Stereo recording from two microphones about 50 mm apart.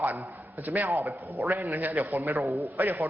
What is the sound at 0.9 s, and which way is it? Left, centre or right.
Speech, right.